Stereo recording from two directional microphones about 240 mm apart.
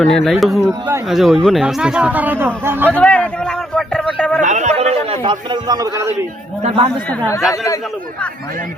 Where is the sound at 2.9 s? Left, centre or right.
Centre.